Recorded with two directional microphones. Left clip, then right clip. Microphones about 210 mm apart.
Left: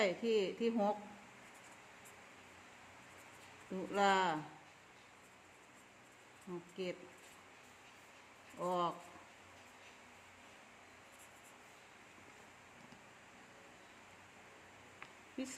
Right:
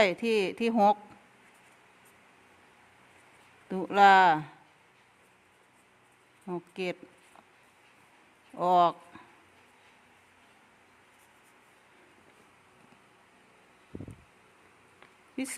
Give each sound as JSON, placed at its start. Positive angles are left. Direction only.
{"t": 0.0, "sound": "speech", "side_deg": -50}
{"t": 3.7, "sound": "speech", "side_deg": -50}
{"t": 6.5, "sound": "speech", "side_deg": -50}
{"t": 8.5, "sound": "speech", "side_deg": -50}
{"t": 15.4, "sound": "speech", "side_deg": -50}